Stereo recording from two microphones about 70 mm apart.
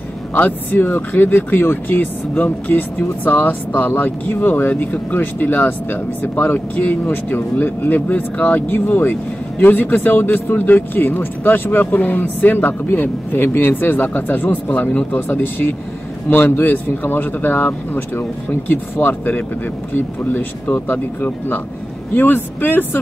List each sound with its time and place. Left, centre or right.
0.3 s speech: left